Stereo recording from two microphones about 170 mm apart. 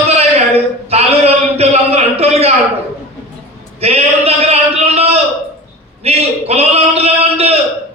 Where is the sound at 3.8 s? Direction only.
35° right (ahead or behind).